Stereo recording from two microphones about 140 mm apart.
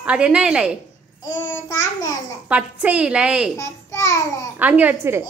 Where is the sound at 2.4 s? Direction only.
10° right (ahead or behind).